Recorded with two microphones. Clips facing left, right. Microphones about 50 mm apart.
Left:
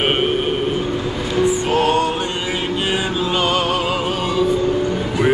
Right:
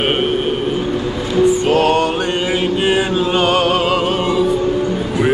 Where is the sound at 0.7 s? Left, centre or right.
Centre.